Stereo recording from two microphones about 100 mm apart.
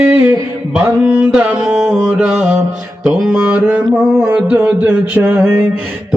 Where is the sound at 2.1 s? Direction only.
5° right (ahead or behind).